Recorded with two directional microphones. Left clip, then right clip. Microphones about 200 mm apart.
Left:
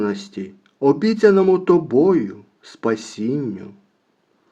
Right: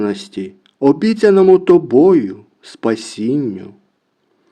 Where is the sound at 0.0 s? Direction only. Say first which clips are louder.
Right 4 dB; 30° right (ahead or behind).